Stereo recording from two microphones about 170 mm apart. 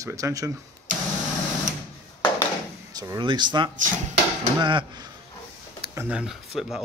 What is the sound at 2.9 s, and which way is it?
Speech, 20° right (ahead or behind).